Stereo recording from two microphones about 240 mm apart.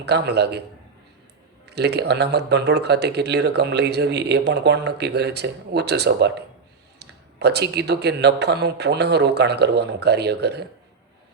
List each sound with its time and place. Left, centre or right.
0.0 s speech: right
1.6 s speech: right